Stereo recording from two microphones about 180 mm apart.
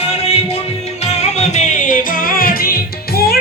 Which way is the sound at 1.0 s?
40° left (ahead or behind).